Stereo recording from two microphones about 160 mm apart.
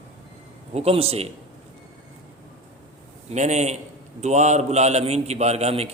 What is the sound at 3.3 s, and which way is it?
A man's voice, 45° right (ahead or behind).